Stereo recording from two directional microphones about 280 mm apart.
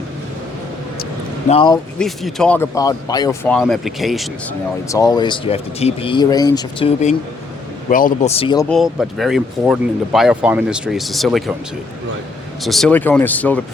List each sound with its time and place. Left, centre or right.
1.5 s speech: centre
2.0 s speech: centre
4.9 s speech: centre
7.9 s speech: left
8.7 s speech: centre
12.6 s speech: centre